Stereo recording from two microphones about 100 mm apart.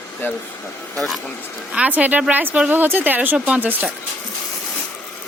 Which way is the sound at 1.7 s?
15° right (ahead or behind).